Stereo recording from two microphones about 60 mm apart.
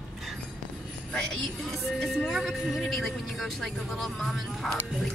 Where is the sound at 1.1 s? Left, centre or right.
Centre.